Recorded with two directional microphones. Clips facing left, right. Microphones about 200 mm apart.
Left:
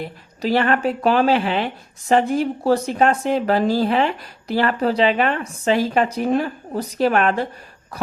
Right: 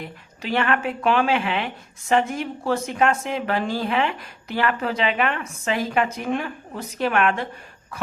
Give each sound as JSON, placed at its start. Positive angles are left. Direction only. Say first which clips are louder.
{"t": 0.0, "sound": "speech", "louder": "left 8 dB", "side_deg": 35}